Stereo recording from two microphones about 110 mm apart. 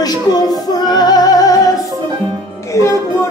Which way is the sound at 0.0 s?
35° left (ahead or behind).